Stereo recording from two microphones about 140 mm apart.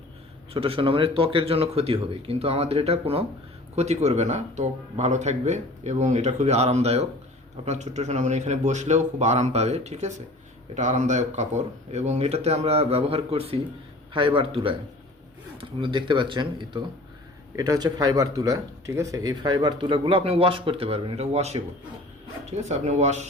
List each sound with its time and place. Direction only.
0.5 s a man's voice: 40° right (ahead or behind)
15.8 s a man's voice: 35° right (ahead or behind); by 23.2 s 55° right (ahead or behind)